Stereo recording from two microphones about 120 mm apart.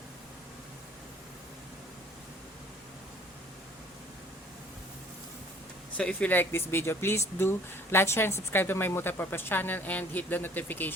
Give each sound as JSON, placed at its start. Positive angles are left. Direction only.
{"t": 6.0, "sound": "a woman's voice", "side_deg": 10}